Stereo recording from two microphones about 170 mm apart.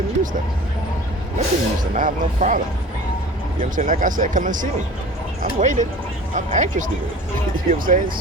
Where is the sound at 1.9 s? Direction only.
50° right (ahead or behind).